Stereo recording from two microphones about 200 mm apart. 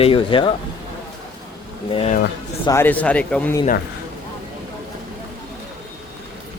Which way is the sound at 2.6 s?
10° left (ahead or behind).